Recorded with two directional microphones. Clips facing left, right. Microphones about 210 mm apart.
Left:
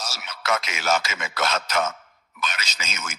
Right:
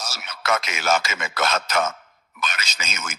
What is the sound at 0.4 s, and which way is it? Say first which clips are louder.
Speech: right 2 dB; 50° right (ahead or behind).